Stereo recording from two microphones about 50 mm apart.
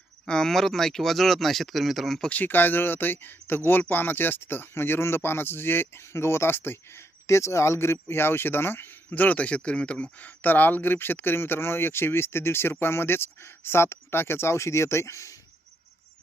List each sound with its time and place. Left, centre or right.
0.3 s speech: centre
2.3 s speech: left
7.3 s speech: left